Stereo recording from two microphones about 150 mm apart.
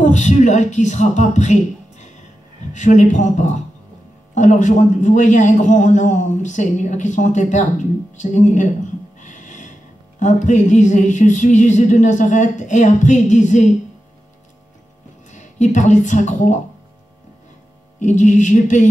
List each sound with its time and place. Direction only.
0.0 s a man's voice: 55° left (ahead or behind)
15.3 s speech: 55° left (ahead or behind)
17.9 s a man's voice: 55° left (ahead or behind)